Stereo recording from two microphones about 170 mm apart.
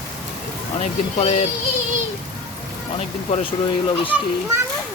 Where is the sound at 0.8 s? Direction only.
40° left (ahead or behind).